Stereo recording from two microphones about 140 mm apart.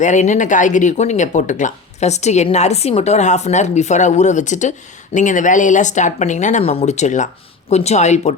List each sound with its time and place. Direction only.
0.0 s speech: 60° left (ahead or behind)